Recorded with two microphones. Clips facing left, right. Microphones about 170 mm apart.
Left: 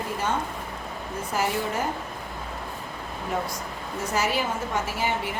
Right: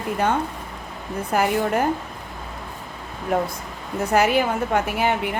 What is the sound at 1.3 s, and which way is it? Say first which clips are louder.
Speech: right 7 dB; 60° right (ahead or behind).